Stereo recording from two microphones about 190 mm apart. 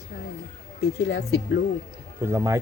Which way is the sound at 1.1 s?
60° left (ahead or behind).